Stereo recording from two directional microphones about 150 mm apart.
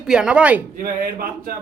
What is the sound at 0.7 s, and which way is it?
Speech, 75° right (ahead or behind).